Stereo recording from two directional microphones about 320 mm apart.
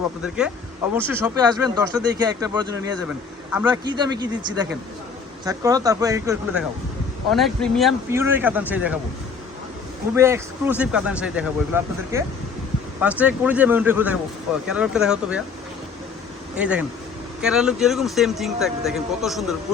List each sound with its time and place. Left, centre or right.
0.9 s speech: centre
10.2 s speech: centre
16.6 s speech: centre